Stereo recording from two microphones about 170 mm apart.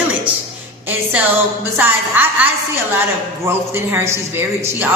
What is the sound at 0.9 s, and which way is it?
Speech, 10° right (ahead or behind).